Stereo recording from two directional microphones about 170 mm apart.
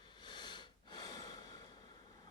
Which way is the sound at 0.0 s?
25° left (ahead or behind).